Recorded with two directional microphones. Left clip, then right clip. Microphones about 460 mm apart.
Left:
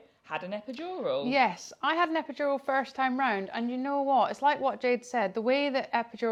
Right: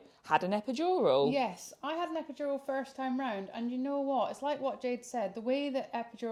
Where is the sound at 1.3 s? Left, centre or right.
Left.